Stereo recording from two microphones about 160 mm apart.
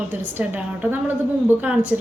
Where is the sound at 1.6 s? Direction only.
10° right (ahead or behind).